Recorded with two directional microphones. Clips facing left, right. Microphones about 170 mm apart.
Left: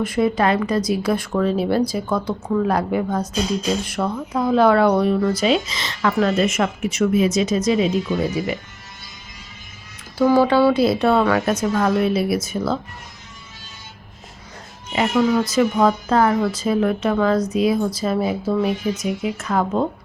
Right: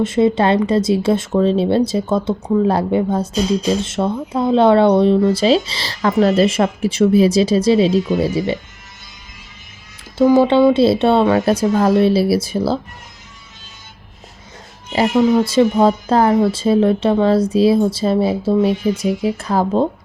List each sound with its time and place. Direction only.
0.0 s speech: 25° right (ahead or behind)
10.2 s speech: 20° right (ahead or behind)
14.9 s speech: 35° right (ahead or behind)
15.2 s speech: 20° right (ahead or behind)